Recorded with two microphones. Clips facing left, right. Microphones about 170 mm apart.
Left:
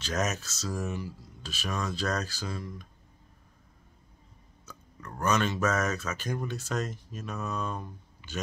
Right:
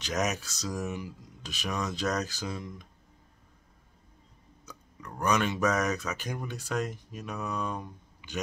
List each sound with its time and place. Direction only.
0.0 s speech: 15° right (ahead or behind)
4.6 s speech: 15° right (ahead or behind)